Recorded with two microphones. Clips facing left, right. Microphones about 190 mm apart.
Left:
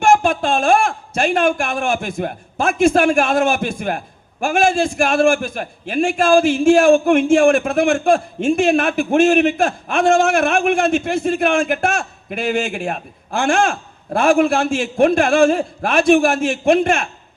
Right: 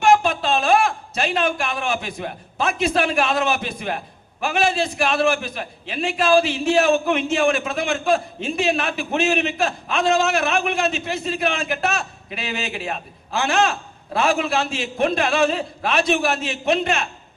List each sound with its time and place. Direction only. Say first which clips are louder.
0.0 s speech: left 2 dB; 50° left (ahead or behind)